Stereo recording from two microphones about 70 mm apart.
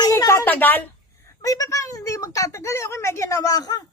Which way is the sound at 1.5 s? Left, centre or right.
Left.